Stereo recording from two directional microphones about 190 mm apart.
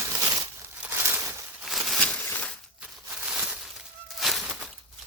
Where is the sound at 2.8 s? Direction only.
5° right (ahead or behind).